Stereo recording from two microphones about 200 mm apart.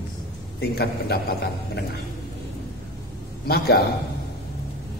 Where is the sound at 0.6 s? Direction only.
50° left (ahead or behind).